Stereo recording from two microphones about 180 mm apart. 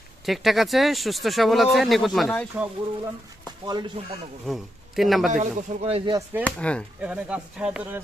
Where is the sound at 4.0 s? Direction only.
35° right (ahead or behind).